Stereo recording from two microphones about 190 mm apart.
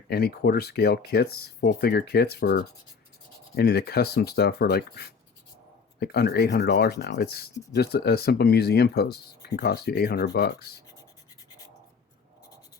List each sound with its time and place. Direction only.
0.1 s speech: 55° left (ahead or behind)